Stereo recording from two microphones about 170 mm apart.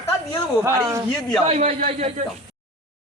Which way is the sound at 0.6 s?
20° right (ahead or behind).